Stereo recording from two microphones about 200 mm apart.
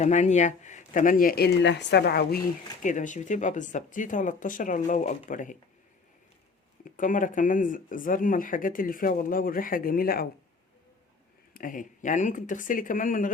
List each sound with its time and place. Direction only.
0.0 s speech: 35° left (ahead or behind); by 2.4 s 50° left (ahead or behind)
2.8 s speech: 40° left (ahead or behind)
6.8 s speech: 40° left (ahead or behind)
11.5 s speech: 45° left (ahead or behind)